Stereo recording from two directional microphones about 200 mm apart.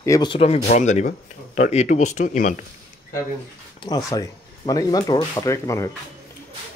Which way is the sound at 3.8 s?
20° left (ahead or behind).